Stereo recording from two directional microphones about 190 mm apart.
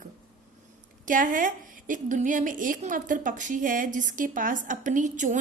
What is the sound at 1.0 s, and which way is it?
A woman's voice, 45° right (ahead or behind).